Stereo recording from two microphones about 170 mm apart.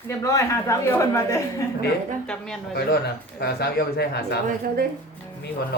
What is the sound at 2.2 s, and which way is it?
Speech, 5° left (ahead or behind).